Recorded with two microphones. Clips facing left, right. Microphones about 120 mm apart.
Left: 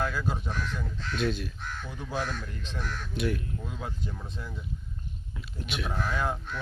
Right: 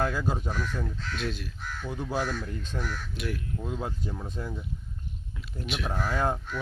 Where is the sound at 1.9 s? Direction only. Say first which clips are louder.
Right 4 dB; 15° right (ahead or behind).